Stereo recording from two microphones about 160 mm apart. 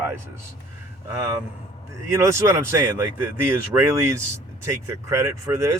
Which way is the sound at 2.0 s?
15° right (ahead or behind).